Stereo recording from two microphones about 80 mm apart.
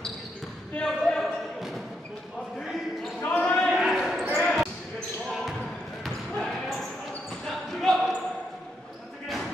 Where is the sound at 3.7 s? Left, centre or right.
Centre.